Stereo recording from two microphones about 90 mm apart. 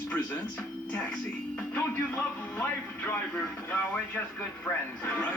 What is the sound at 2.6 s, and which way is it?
Speech, 20° left (ahead or behind).